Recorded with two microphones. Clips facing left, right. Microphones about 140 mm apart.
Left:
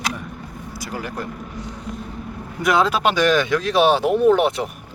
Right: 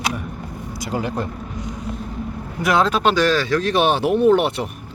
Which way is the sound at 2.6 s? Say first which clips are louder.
Even; centre (ahead or behind).